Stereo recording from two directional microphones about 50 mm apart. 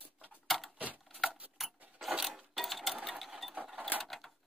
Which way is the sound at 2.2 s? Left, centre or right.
Centre.